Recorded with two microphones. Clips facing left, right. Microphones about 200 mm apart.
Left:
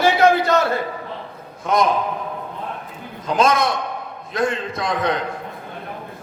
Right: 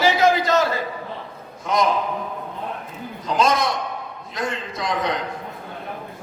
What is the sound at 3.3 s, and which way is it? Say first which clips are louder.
A man's voice: left 2 dB; 55° left (ahead or behind).